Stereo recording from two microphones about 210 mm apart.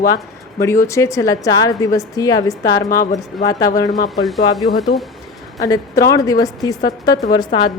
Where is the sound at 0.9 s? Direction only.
15° left (ahead or behind).